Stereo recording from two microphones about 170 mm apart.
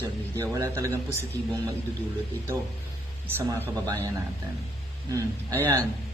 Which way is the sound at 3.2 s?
15° right (ahead or behind).